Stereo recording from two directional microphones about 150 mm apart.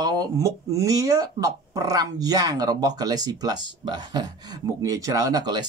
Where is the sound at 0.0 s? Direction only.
25° right (ahead or behind).